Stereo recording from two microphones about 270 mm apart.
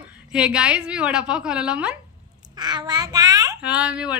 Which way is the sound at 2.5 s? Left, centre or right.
Centre.